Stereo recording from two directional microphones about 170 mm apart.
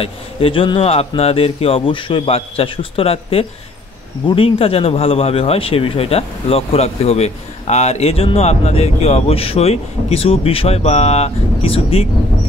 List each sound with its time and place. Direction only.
0.0 s speech: 30° left (ahead or behind)